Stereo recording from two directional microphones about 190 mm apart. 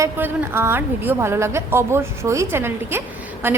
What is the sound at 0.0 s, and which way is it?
A woman's voice, 15° right (ahead or behind).